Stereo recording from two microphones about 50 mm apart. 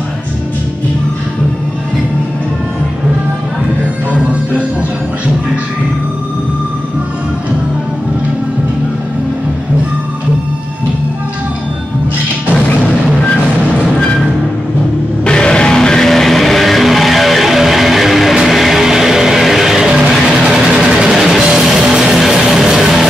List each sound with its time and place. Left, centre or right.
4.1 s music: right
15.2 s music: centre